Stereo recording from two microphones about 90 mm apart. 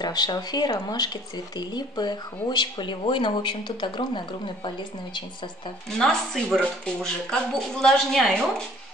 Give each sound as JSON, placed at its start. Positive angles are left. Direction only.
{"t": 0.0, "sound": "speech", "side_deg": 50}
{"t": 5.9, "sound": "speech", "side_deg": 5}